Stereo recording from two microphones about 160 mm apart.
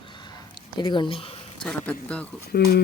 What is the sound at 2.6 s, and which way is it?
Speech, 90° left.